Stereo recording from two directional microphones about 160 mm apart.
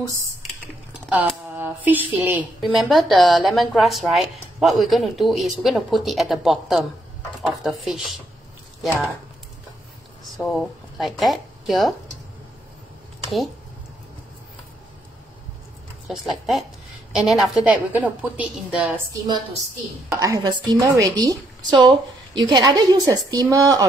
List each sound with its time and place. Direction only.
0.0 s a woman's voice: 20° right (ahead or behind)
1.6 s a woman's voice: 10° right (ahead or behind)
2.6 s speech: centre (ahead or behind)
10.2 s speech: centre (ahead or behind)
16.1 s a woman's voice: centre (ahead or behind)
19.1 s a woman's voice: 25° right (ahead or behind)